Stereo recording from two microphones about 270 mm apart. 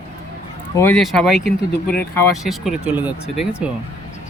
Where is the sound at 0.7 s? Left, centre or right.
Centre.